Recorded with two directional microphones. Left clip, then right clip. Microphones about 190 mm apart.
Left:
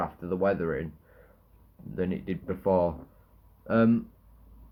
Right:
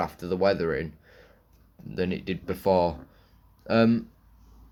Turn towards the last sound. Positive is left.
turn(degrees=-20)  # may be behind; listen again after turning